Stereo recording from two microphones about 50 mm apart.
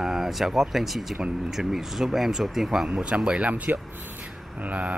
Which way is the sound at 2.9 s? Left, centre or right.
Right.